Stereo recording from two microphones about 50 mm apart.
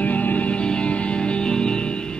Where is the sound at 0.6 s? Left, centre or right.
Left.